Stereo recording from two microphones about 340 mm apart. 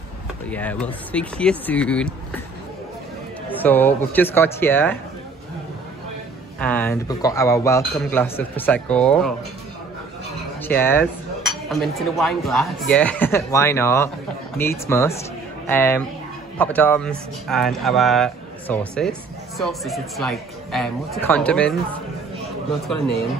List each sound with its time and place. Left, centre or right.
0.5 s speech: centre
3.4 s speech: centre
6.6 s speech: centre
10.6 s speech: centre